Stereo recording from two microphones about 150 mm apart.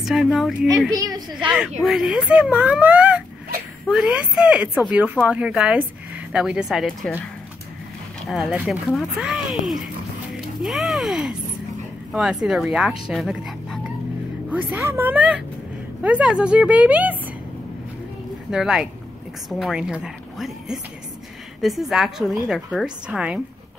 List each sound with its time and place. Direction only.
0.0 s a woman's voice: centre (ahead or behind)
0.9 s a woman's voice: 25° right (ahead or behind)
1.8 s a woman's voice: centre (ahead or behind)
8.3 s a woman's voice: 5° right (ahead or behind)
14.5 s speech: 10° right (ahead or behind)
18.5 s a woman's voice: 5° right (ahead or behind)